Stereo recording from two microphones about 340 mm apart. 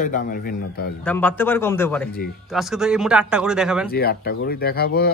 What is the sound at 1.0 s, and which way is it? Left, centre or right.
Speech, centre.